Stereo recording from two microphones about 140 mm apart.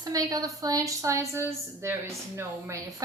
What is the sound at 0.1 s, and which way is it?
A woman's voice, 25° right (ahead or behind).